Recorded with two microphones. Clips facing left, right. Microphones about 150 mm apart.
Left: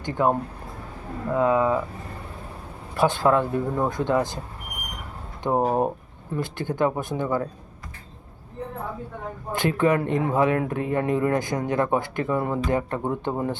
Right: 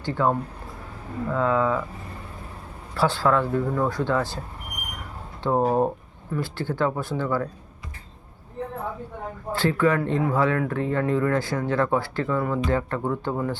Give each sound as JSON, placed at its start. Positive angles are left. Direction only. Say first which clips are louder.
{"t": 0.0, "sound": "speech", "louder": "left 1 dB", "side_deg": 20}
{"t": 2.9, "sound": "speech", "louder": "left 2 dB", "side_deg": 20}
{"t": 5.4, "sound": "speech", "louder": "right 1 dB", "side_deg": 15}
{"t": 9.5, "sound": "speech", "louder": "even", "side_deg": 20}